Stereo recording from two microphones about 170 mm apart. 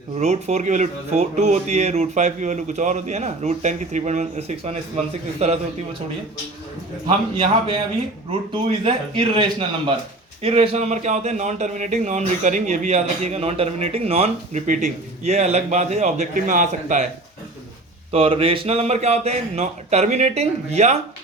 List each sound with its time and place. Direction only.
0.2 s a man's voice: 40° right (ahead or behind)
8.3 s a man's voice: 35° right (ahead or behind)
18.1 s a man's voice: 35° right (ahead or behind)